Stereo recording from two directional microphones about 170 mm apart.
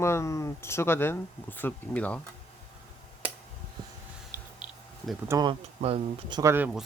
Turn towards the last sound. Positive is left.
turn(degrees=-10)  # may be behind; listen again after turning